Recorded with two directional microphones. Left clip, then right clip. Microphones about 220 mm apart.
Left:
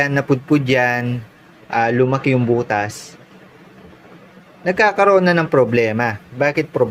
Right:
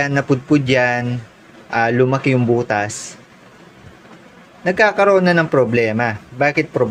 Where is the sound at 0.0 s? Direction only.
Centre (ahead or behind).